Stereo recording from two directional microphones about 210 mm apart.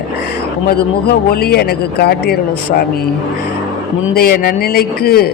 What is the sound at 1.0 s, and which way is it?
Speech, 50° left (ahead or behind).